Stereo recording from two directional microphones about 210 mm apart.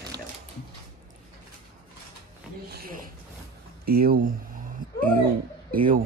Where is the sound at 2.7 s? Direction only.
45° right (ahead or behind).